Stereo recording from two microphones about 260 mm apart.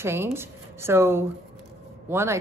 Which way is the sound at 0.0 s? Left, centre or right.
Centre.